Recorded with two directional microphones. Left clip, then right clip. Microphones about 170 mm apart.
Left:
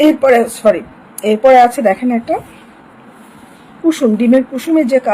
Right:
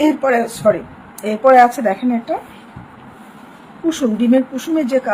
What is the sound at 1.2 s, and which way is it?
Speech, 30° left (ahead or behind).